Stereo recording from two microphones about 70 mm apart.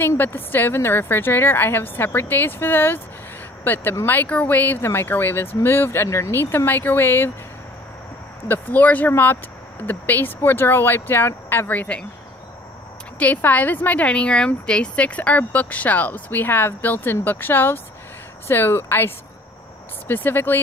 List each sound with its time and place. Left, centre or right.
0.0 s a woman's voice: left
6.0 s speech: left
6.3 s a woman's voice: left
8.5 s a woman's voice: left
13.2 s a woman's voice: left